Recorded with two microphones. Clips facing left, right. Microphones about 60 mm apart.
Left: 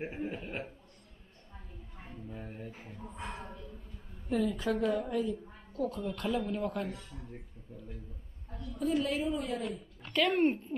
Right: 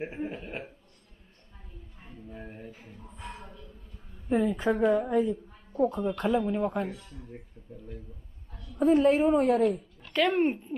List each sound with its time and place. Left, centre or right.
0.0 s a man's voice: centre
2.3 s a sound: centre
4.3 s a woman's voice: right
7.7 s a man's voice: centre
8.7 s a woman's voice: right
10.1 s speech: right
10.4 s a woman's voice: centre